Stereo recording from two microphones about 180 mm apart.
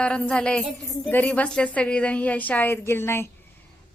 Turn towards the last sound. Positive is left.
turn(degrees=15)  # may be behind; listen again after turning